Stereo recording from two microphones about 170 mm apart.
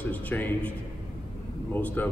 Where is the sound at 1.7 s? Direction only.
10° left (ahead or behind).